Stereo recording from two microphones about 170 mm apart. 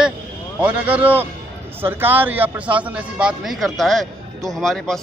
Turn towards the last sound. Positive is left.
turn(degrees=0)  # may be behind; listen again after turning